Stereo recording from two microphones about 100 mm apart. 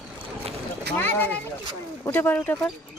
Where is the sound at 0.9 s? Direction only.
20° left (ahead or behind).